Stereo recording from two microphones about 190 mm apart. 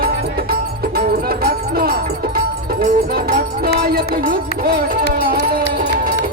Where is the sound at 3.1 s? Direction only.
55° right (ahead or behind).